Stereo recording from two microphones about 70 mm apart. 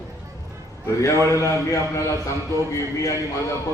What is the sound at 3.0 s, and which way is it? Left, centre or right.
Speech, left.